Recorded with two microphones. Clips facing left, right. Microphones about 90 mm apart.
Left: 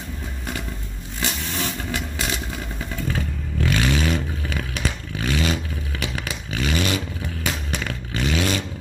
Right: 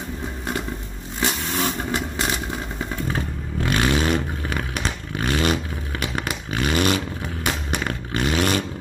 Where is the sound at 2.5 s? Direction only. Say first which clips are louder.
Right 3 dB; 35° right (ahead or behind).